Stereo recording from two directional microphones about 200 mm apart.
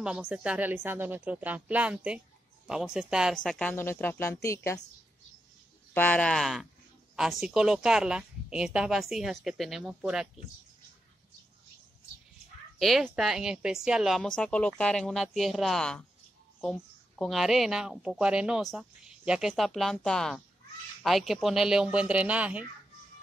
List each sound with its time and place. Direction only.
0.0 s a woman's voice: 5° right (ahead or behind); by 4.8 s 15° left (ahead or behind)
5.9 s speech: 5° left (ahead or behind)
12.7 s speech: centre (ahead or behind)